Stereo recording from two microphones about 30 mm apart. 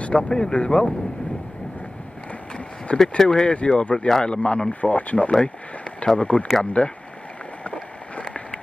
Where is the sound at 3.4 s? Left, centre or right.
Left.